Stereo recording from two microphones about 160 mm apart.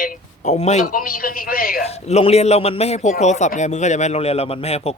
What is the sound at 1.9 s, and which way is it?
A man's voice, 40° left (ahead or behind).